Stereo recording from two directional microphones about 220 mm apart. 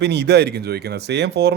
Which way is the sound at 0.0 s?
50° right (ahead or behind).